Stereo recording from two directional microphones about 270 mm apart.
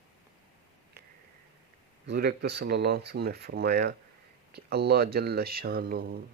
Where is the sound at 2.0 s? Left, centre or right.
Right.